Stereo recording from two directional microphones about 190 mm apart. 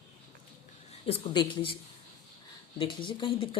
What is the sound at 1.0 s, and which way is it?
Speech, 25° left (ahead or behind).